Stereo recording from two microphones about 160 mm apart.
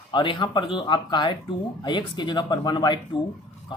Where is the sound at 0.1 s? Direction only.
30° left (ahead or behind).